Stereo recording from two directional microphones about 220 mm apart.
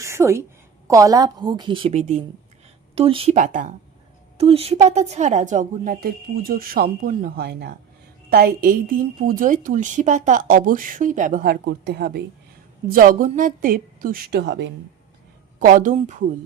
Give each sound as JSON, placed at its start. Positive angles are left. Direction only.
{"t": 0.0, "sound": "a sound", "side_deg": -10}
{"t": 0.9, "sound": "a woman's voice", "side_deg": -15}
{"t": 15.5, "sound": "a woman's voice", "side_deg": -35}